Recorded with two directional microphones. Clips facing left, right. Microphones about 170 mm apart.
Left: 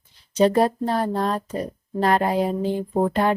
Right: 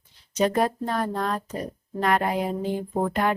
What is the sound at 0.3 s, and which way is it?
Speech, 30° left (ahead or behind).